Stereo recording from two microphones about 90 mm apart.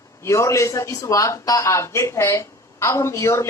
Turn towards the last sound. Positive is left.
turn(degrees=35)  # may be behind; listen again after turning